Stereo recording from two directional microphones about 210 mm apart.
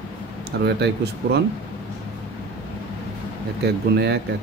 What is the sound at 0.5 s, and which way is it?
Speech, 55° right (ahead or behind).